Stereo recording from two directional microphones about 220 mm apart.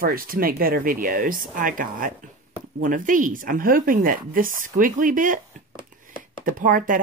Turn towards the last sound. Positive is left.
turn(degrees=-40)  # may be behind; listen again after turning